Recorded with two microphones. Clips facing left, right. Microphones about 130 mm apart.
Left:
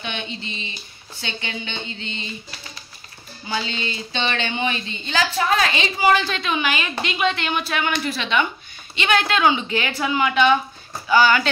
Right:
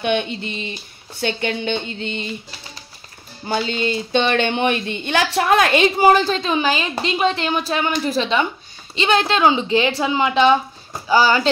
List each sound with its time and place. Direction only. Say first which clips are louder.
0.0 s speech: right 10 dB; 55° right (ahead or behind)
3.4 s a woman's voice: right 6 dB; 50° right (ahead or behind); by 11.4 s 30° right (ahead or behind)